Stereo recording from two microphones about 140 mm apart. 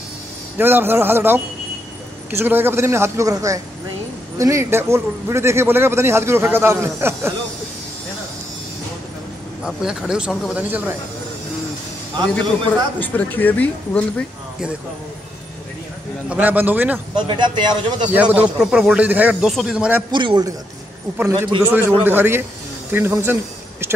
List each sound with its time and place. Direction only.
0.6 s a man's voice: 15° right (ahead or behind)
9.6 s speech: 5° right (ahead or behind)
10.5 s a man's voice: 10° right (ahead or behind)
13.0 s speech: 10° left (ahead or behind)
16.3 s a man's voice: 10° right (ahead or behind)
17.3 s a man's voice: 35° right (ahead or behind)
18.1 s a man's voice: 10° right (ahead or behind)
20.1 s a man's voice: 35° right (ahead or behind)
21.2 s a man's voice: 20° right (ahead or behind)